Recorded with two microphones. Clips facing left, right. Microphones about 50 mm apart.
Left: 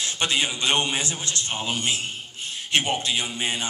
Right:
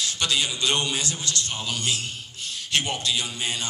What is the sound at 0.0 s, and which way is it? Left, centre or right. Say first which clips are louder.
A man's voice: left 1 dB; left.